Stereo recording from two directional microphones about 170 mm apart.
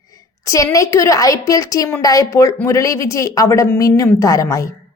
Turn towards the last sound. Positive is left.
turn(degrees=20)  # may be behind; listen again after turning